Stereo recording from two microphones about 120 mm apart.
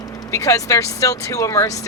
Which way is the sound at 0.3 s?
25° left (ahead or behind).